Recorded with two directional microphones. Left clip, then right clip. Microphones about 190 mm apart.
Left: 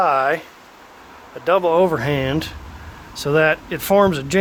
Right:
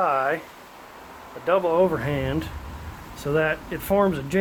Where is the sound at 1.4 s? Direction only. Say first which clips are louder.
Left 5 dB; 55° left (ahead or behind).